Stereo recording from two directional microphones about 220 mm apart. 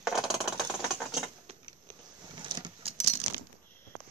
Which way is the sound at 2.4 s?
20° right (ahead or behind).